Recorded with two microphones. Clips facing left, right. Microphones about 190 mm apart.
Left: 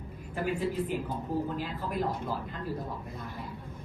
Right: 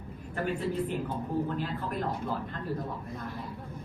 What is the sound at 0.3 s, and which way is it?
A woman's voice, 10° left (ahead or behind).